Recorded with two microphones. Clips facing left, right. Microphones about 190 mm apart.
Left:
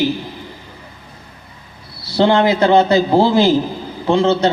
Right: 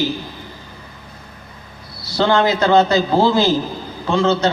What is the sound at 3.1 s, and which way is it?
Speech, 15° left (ahead or behind).